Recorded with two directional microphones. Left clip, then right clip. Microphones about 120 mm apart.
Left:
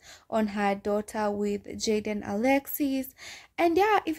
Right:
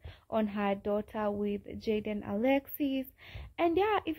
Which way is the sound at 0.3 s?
40° left (ahead or behind).